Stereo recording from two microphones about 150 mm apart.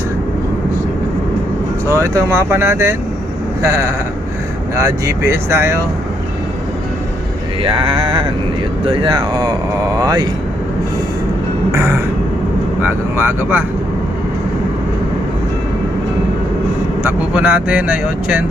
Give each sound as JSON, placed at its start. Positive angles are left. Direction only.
{"t": 1.9, "sound": "speech", "side_deg": -20}
{"t": 7.6, "sound": "a sound", "side_deg": -35}
{"t": 8.8, "sound": "speech", "side_deg": -35}
{"t": 11.7, "sound": "a sound", "side_deg": -15}
{"t": 12.8, "sound": "speech", "side_deg": -15}
{"t": 17.0, "sound": "speech", "side_deg": -10}